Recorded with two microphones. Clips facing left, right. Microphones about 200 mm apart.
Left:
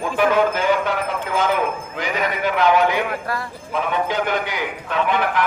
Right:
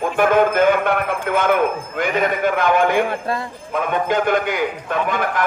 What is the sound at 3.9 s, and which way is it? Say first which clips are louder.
A man's voice: right 4 dB; 50° right (ahead or behind).